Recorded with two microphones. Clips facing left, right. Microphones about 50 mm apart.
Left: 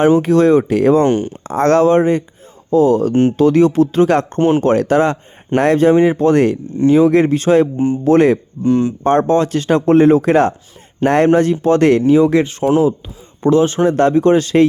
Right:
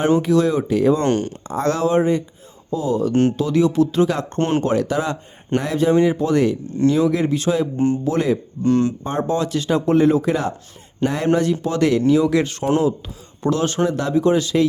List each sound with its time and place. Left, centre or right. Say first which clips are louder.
0.2 s speech: left 6 dB; left
0.9 s speech: left 6 dB; centre
1.5 s speech: left 9 dB; left
3.1 s speech: left 4 dB; left
3.3 s speech: left 6 dB; left
4.4 s speech: left 4 dB; centre
4.6 s speech: left 7 dB; left
8.6 s speech: left 3 dB; centre
9.0 s speech: left 8 dB; left
12.0 s speech: left 5 dB; left
13.8 s speech: left 6 dB; left